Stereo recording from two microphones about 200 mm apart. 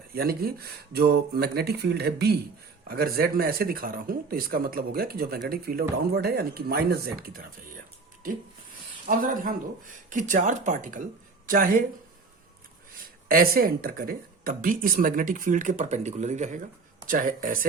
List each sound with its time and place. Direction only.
0.1 s speech: 50° right (ahead or behind)
13.2 s speech: 45° right (ahead or behind)